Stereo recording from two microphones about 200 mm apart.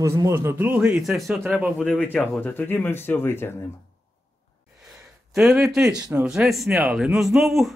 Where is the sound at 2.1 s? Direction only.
10° left (ahead or behind).